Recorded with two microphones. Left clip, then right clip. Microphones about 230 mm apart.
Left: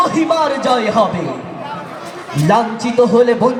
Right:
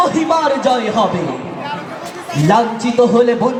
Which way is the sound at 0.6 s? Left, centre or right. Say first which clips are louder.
Left 1 dB; left.